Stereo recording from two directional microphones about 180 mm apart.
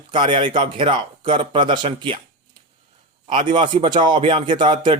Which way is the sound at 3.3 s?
25° right (ahead or behind).